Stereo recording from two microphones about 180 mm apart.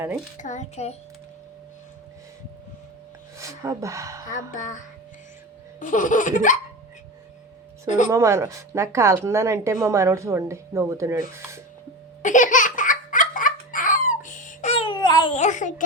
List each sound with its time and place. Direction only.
0.3 s a child's voice: 40° left (ahead or behind)
3.3 s a woman's voice: 15° right (ahead or behind)
4.3 s laughter: 45° left (ahead or behind)
5.8 s laughter: 45° left (ahead or behind)
7.9 s a child's voice: 40° left (ahead or behind)
8.1 s a woman's voice: 15° right (ahead or behind)
12.2 s laughter: 45° left (ahead or behind); by 15.4 s 25° left (ahead or behind)
15.4 s laughter: 45° left (ahead or behind)